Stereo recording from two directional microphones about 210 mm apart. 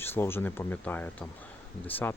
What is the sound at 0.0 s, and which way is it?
Speech, 10° left (ahead or behind).